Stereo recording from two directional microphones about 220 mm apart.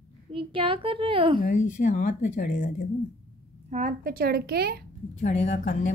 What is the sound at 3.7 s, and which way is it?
A woman's voice, 35° right (ahead or behind).